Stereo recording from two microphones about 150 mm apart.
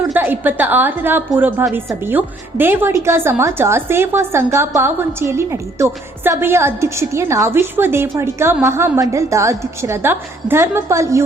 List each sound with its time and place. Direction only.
0.1 s a woman's voice: 10° right (ahead or behind)